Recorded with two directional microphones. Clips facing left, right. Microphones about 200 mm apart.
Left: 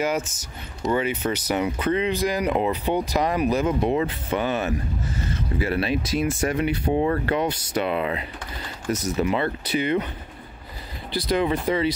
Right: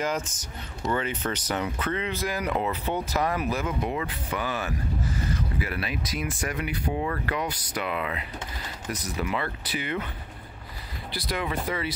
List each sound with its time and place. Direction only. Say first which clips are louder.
0.0 s speech: left 4 dB; 10° left (ahead or behind)
11.1 s speech: left 8 dB; 25° left (ahead or behind)